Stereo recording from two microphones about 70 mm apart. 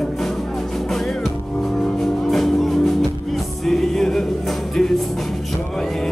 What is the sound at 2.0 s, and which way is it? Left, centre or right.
Music, centre.